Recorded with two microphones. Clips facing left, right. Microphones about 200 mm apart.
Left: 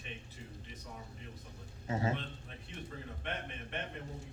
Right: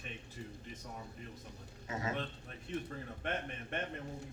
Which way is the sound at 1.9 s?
30° left (ahead or behind).